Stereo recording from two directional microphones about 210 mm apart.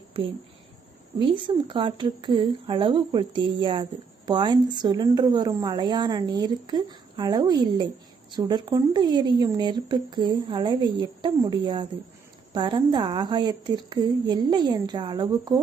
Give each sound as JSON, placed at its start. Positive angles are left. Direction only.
{"t": 0.1, "sound": "a woman's voice", "side_deg": -25}